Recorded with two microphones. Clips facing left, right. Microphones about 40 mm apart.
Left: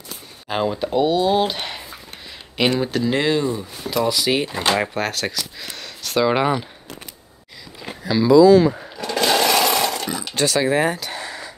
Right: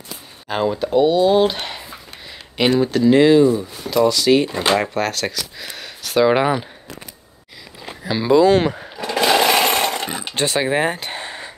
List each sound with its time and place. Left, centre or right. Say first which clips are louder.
0.5 s speech: right 2 dB; centre
8.4 s speech: left 3 dB; right
8.9 s sewing machine: right 7 dB; centre; by 11.5 s right